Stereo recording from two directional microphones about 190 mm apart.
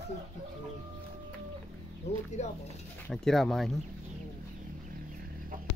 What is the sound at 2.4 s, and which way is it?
Speech, 40° left (ahead or behind).